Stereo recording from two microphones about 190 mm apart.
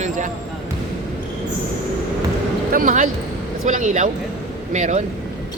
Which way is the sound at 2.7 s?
45° right (ahead or behind).